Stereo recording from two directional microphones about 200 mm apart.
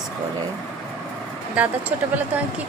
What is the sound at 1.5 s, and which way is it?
Speech, 5° right (ahead or behind).